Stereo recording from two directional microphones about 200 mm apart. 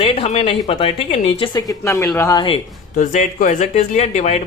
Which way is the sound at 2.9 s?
40° left (ahead or behind).